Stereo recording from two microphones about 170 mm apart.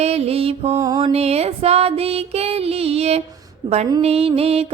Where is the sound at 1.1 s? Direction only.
40° right (ahead or behind).